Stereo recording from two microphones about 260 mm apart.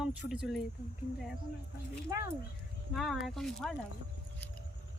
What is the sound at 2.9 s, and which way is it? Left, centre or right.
Speech, centre.